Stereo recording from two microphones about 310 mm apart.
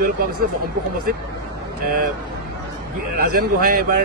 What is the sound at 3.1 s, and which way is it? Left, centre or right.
Speech, right.